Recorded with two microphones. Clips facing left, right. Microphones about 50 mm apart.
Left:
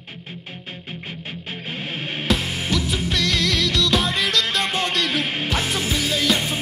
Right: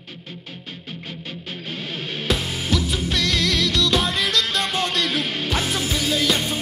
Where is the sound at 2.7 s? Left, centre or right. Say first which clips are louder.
Right 1 dB; centre.